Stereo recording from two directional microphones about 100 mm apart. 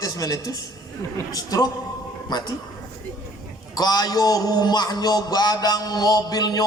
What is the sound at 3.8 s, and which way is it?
A man's voice, 40° left (ahead or behind).